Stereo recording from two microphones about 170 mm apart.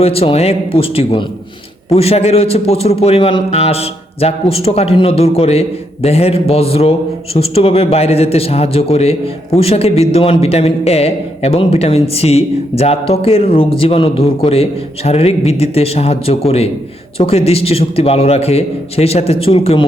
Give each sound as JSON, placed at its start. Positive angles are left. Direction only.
{"t": 0.0, "sound": "a man's voice", "side_deg": 35}